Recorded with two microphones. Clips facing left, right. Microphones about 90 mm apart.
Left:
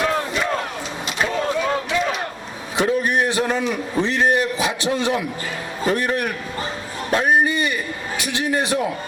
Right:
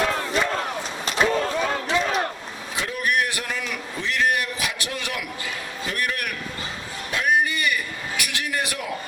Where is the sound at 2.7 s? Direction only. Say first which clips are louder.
Left 6 dB; 35° left (ahead or behind).